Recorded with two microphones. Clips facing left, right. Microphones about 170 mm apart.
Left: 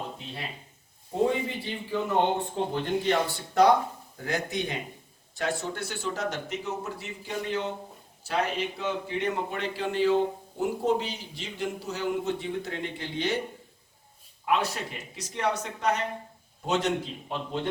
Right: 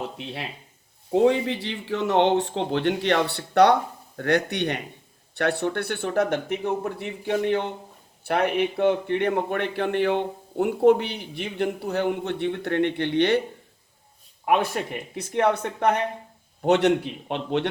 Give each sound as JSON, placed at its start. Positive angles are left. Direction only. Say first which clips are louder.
{"t": 1.1, "sound": "a man's voice", "louder": "right 7 dB", "side_deg": -85}
{"t": 14.4, "sound": "a man's voice", "louder": "right 5 dB", "side_deg": -55}